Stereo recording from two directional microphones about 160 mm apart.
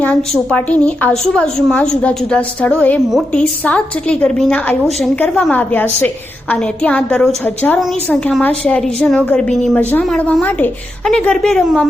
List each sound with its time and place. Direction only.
0.0 s a woman's voice: 10° left (ahead or behind)
3.1 s a woman's voice: centre (ahead or behind)